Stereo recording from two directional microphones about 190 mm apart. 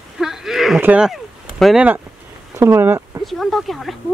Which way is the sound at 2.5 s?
15° right (ahead or behind).